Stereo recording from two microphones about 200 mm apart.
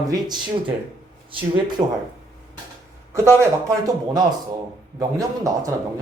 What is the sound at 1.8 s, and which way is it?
Speech, 20° right (ahead or behind).